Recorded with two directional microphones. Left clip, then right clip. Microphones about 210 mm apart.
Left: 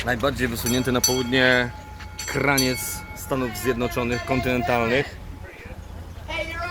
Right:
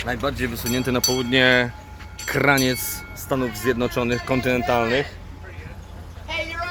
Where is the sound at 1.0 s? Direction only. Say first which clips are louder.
Right 2 dB; 45° right (ahead or behind).